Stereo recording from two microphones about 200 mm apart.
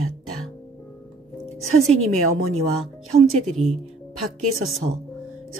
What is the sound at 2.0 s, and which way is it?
Speech, 90° right.